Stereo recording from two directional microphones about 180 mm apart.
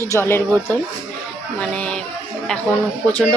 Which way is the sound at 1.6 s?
5° left (ahead or behind).